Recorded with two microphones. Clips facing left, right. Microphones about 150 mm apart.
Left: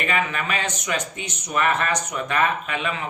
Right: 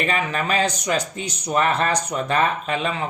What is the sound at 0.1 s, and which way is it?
Speech, 35° right (ahead or behind).